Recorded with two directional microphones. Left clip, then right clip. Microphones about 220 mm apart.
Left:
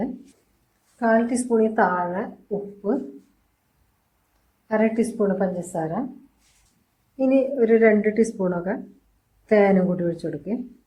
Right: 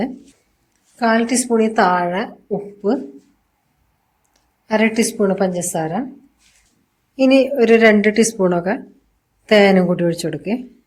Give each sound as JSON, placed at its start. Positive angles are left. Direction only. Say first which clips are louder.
{"t": 0.9, "sound": "a woman's voice", "louder": "right 4 dB", "side_deg": -45}
{"t": 4.7, "sound": "a woman's voice", "louder": "right 5 dB", "side_deg": -50}
{"t": 7.2, "sound": "a woman's voice", "louder": "right 6 dB", "side_deg": -40}